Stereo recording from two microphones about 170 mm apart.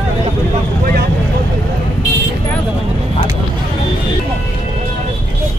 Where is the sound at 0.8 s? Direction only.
60° right (ahead or behind).